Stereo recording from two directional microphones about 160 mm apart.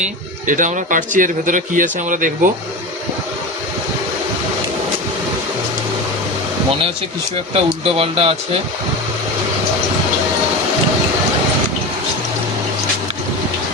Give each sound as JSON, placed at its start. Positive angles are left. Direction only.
{"t": 0.4, "sound": "speech", "side_deg": -55}
{"t": 7.5, "sound": "speech", "side_deg": -40}